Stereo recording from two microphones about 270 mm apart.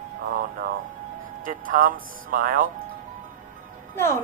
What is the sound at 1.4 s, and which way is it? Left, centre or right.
Speech, right.